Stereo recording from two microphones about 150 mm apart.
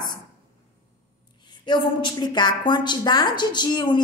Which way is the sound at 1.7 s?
30° left (ahead or behind).